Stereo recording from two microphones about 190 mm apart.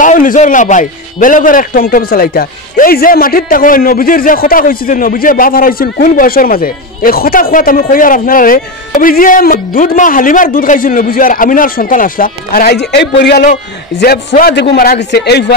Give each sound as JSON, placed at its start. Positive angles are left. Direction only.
{"t": 0.0, "sound": "a man's voice", "side_deg": 45}